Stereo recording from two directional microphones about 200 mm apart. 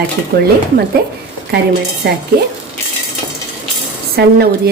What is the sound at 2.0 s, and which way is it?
Stir, 55° right (ahead or behind).